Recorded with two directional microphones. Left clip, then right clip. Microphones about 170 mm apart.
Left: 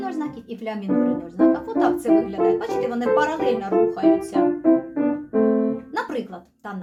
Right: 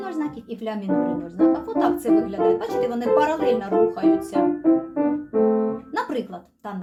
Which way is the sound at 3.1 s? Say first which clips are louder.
Right 1 dB; centre (ahead or behind).